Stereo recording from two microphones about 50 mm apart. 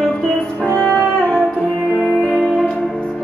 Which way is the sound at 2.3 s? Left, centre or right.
Centre.